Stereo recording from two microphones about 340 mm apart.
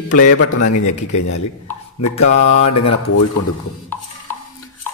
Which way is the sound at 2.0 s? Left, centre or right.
Left.